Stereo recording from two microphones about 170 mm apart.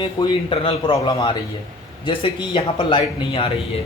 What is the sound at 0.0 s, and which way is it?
Speech, 30° left (ahead or behind).